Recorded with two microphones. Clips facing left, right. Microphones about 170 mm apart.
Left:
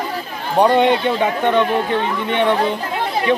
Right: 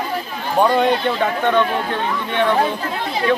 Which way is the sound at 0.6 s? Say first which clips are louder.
Left 2 dB; 20° left (ahead or behind).